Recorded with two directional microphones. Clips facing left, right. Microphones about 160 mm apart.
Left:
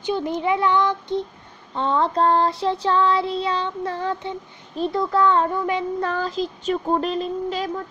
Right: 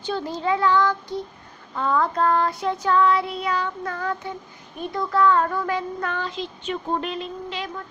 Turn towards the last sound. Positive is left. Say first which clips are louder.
# left 6 dB
turn(degrees=40)  # may be behind; listen again after turning